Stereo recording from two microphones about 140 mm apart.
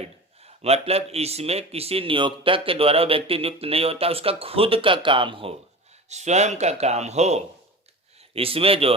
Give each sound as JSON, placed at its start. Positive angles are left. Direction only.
{"t": 0.4, "sound": "speech", "side_deg": -45}
{"t": 6.1, "sound": "speech", "side_deg": -55}